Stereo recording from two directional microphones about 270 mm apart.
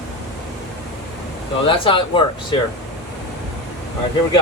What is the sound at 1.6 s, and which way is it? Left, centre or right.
Speech, centre.